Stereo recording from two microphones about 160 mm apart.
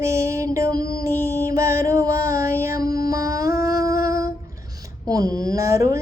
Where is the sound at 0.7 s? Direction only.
70° left (ahead or behind).